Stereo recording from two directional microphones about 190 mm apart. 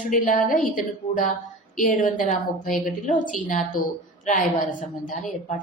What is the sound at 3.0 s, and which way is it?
A woman's voice, 45° left (ahead or behind).